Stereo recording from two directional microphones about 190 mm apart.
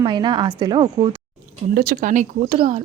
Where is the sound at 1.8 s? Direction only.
45° right (ahead or behind).